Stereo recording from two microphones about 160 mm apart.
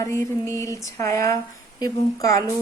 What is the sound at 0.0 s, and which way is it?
Speech, 15° left (ahead or behind).